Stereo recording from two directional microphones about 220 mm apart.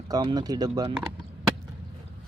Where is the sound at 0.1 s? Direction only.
20° right (ahead or behind).